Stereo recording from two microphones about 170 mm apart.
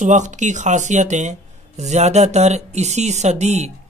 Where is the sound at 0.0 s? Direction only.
45° right (ahead or behind).